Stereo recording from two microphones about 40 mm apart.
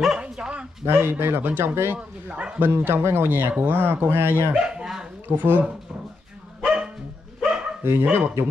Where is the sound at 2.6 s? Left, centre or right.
Right.